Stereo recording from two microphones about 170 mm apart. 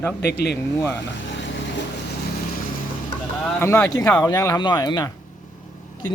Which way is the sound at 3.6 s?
15° left (ahead or behind).